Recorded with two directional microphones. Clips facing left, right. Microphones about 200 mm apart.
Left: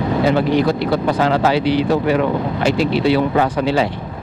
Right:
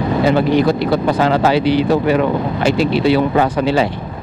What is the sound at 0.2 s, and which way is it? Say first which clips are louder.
Speech: right 2 dB; 15° right (ahead or behind).